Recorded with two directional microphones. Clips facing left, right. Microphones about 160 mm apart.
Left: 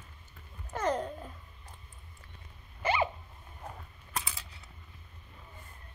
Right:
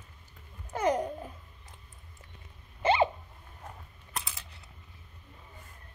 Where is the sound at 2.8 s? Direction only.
25° right (ahead or behind).